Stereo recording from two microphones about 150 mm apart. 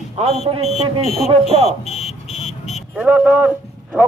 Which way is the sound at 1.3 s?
40° right (ahead or behind).